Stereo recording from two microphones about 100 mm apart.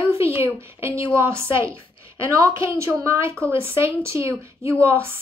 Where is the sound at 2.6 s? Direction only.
30° right (ahead or behind).